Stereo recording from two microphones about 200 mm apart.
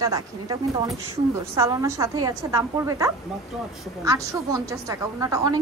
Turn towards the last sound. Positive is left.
turn(degrees=-15)  # may be behind; listen again after turning